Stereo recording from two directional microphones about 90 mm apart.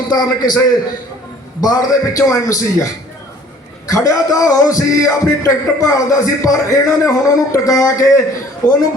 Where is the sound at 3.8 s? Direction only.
40° left (ahead or behind).